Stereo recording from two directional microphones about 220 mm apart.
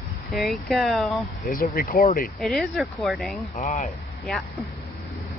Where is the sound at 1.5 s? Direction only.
40° left (ahead or behind).